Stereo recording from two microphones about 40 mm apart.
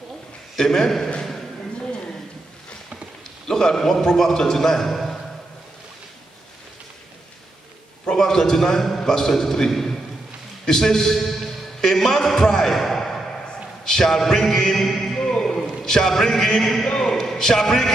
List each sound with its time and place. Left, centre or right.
0.6 s a man's voice: centre
1.8 s a sound: left
3.4 s a man's voice: centre
8.0 s a man's voice: centre
15.1 s a sound: left
17.0 s a man's voice: centre